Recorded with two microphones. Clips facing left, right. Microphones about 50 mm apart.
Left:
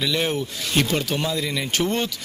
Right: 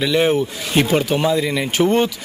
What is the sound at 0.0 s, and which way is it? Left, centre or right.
Speech, centre.